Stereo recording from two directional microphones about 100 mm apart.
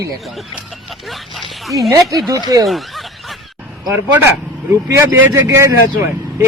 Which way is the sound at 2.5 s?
40° right (ahead or behind).